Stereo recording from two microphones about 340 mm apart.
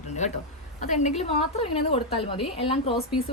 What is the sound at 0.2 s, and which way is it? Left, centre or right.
A woman's voice, centre.